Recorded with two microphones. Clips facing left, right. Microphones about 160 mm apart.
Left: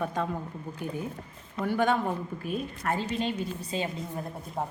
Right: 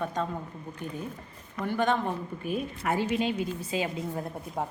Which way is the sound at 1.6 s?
10° left (ahead or behind).